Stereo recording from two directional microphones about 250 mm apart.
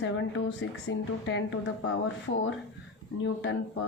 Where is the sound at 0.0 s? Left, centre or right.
Left.